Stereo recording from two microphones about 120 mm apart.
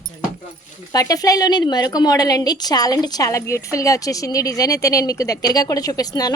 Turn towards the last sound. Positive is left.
turn(degrees=30)  # may be behind; listen again after turning